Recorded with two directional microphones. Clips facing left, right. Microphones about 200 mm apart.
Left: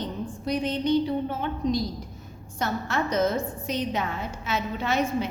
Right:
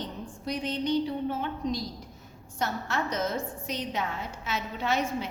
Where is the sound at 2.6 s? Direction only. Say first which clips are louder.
Left 3 dB; 55° left (ahead or behind).